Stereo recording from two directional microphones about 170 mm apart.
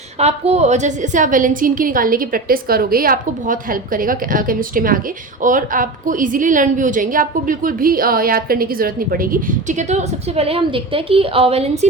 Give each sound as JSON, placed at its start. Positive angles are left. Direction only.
{"t": 0.2, "sound": "a woman's voice", "side_deg": -40}